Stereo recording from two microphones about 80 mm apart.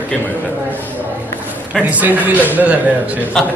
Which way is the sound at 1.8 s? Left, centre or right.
Centre.